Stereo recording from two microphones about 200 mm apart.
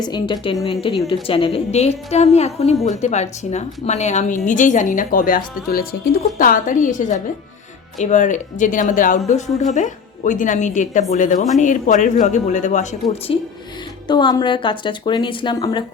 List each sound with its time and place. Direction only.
0.0 s a woman's voice: 20° left (ahead or behind)
14.1 s a woman's voice: 20° left (ahead or behind)